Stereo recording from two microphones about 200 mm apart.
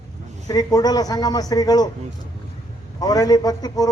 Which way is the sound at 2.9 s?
20° left (ahead or behind).